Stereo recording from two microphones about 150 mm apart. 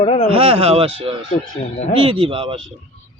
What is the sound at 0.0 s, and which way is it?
Speech, 40° left (ahead or behind).